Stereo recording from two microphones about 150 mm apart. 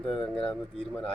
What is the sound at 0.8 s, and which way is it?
Speech, 5° left (ahead or behind).